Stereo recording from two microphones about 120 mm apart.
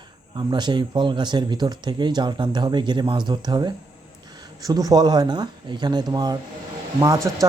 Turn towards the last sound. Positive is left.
turn(degrees=-30)  # may be behind; listen again after turning